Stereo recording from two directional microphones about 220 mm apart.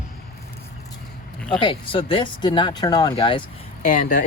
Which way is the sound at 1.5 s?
25° left (ahead or behind).